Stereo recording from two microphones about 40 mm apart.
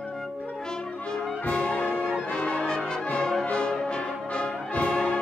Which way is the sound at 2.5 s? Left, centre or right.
Left.